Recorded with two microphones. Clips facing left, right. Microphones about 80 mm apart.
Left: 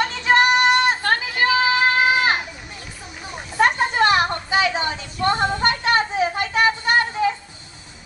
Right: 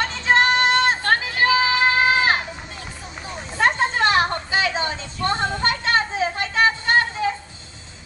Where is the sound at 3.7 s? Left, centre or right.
Centre.